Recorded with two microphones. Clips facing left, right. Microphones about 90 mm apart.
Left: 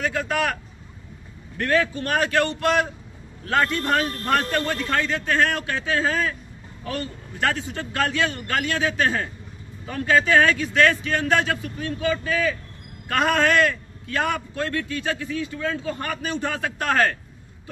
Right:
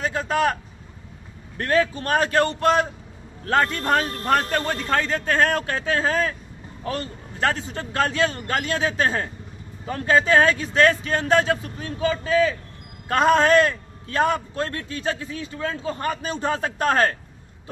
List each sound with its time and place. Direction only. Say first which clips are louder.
0.0 s a man's voice: right 2 dB; 30° right (ahead or behind)
1.6 s a man's voice: right 1 dB; 35° right (ahead or behind)